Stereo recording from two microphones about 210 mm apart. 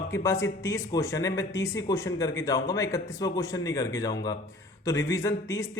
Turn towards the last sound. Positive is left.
turn(degrees=15)  # may be behind; listen again after turning